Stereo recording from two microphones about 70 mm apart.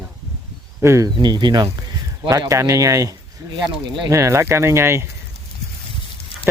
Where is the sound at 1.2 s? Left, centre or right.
Right.